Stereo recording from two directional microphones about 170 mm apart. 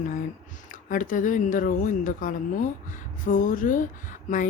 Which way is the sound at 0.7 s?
50° left (ahead or behind).